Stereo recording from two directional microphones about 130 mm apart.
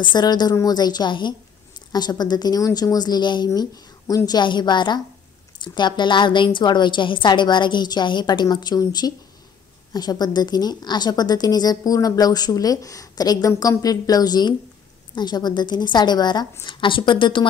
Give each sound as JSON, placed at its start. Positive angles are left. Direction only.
{"t": 0.1, "sound": "a woman's voice", "side_deg": 35}